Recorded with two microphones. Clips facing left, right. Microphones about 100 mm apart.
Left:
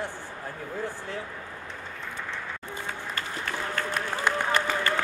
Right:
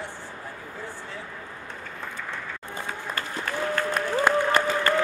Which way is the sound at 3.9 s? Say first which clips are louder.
Right 6 dB; 45° right (ahead or behind).